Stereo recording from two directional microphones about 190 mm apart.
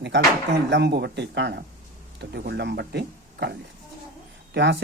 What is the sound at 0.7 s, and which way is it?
Speech, 60° right (ahead or behind).